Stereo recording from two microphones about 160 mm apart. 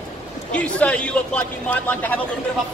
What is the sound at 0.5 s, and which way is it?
A man's voice, 10° left (ahead or behind).